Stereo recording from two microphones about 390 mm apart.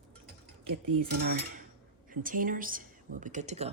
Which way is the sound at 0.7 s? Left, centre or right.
Right.